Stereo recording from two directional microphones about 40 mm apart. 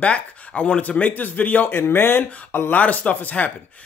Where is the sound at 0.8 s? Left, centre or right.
Left.